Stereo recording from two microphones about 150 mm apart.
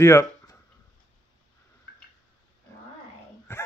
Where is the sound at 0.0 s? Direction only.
20° left (ahead or behind).